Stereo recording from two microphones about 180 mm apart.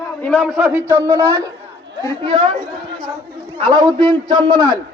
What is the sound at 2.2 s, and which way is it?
Speech, 25° right (ahead or behind).